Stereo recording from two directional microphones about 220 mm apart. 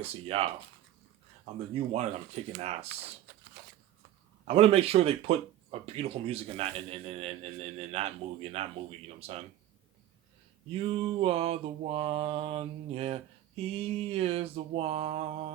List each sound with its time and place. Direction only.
0.0 s mantra: 25° right (ahead or behind)
1.9 s mantra: 30° right (ahead or behind)
3.3 s a sound: 40° right (ahead or behind)
4.4 s mantra: 25° right (ahead or behind)
10.8 s mantra: 25° right (ahead or behind)